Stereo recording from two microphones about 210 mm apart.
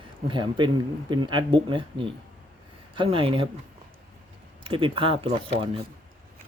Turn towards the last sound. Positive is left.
turn(degrees=-25)  # may be behind; listen again after turning